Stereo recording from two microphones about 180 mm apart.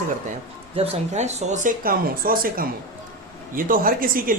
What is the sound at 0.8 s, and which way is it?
Speech, 35° right (ahead or behind).